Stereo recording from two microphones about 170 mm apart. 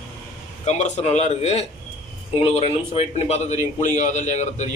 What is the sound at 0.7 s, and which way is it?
A man's voice, 45° left (ahead or behind).